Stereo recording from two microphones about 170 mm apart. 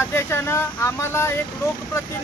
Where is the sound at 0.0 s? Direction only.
15° left (ahead or behind).